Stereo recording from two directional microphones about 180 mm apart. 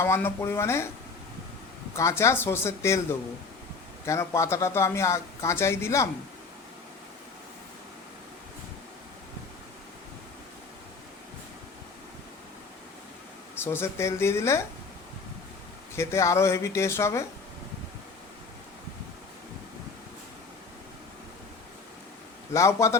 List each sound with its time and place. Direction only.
0.0 s speech: 15° left (ahead or behind)
2.0 s speech: 15° left (ahead or behind)
13.7 s speech: 15° left (ahead or behind)
16.0 s speech: 15° left (ahead or behind)
22.5 s speech: 15° left (ahead or behind)